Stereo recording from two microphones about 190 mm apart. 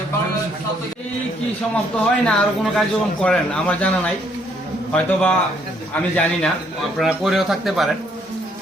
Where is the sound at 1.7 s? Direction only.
5° left (ahead or behind).